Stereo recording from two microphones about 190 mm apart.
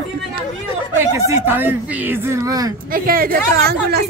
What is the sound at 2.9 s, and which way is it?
A woman's voice, 50° right (ahead or behind).